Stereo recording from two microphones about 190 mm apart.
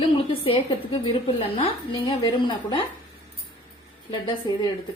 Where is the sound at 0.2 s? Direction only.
30° left (ahead or behind).